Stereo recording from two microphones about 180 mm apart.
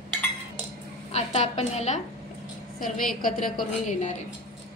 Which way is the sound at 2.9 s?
50° left (ahead or behind).